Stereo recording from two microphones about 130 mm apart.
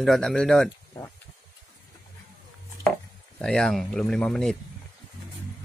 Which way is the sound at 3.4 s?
5° left (ahead or behind).